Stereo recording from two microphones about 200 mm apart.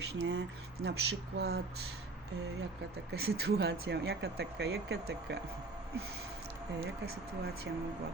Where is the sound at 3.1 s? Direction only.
50° right (ahead or behind).